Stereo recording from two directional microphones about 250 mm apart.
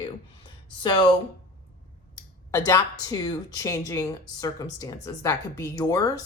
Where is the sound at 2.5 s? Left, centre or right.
Centre.